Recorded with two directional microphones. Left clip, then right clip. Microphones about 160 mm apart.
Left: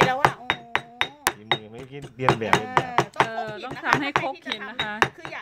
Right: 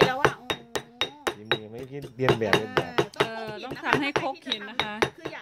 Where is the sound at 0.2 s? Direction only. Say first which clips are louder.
Left 3 dB; 5° left (ahead or behind).